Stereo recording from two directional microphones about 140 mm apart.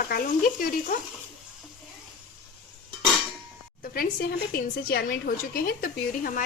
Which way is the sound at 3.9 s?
90° left.